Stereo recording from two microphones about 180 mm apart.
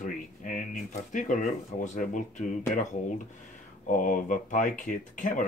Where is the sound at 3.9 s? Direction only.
45° left (ahead or behind).